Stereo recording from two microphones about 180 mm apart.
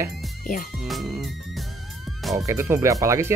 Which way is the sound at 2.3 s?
15° right (ahead or behind).